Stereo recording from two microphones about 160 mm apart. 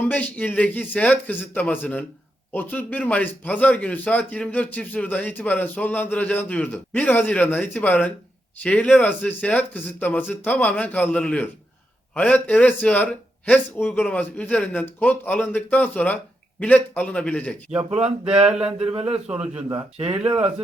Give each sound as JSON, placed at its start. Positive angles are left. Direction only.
{"t": 0.0, "sound": "a man's voice", "side_deg": 10}
{"t": 17.9, "sound": "speech", "side_deg": -40}